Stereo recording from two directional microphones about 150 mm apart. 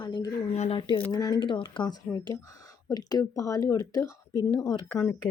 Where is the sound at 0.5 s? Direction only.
45° left (ahead or behind).